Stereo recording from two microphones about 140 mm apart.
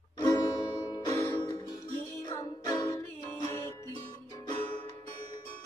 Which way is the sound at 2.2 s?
25° left (ahead or behind).